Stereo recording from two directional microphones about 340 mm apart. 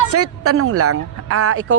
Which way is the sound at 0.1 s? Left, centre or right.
Right.